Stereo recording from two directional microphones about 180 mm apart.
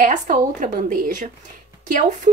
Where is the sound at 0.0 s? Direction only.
45° right (ahead or behind).